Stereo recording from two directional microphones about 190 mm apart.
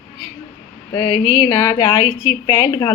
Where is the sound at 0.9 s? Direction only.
25° left (ahead or behind).